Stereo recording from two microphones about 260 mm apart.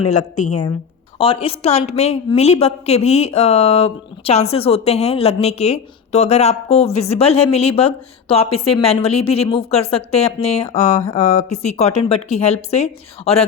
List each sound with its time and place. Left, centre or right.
0.1 s a woman's voice: left